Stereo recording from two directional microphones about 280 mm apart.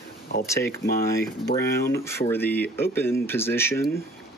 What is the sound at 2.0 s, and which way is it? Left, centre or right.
Speech, centre.